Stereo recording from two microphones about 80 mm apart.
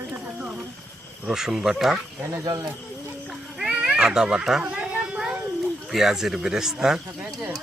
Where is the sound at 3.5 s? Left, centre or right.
Centre.